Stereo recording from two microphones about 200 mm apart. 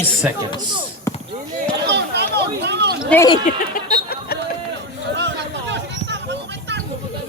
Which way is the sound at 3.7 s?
50° left (ahead or behind).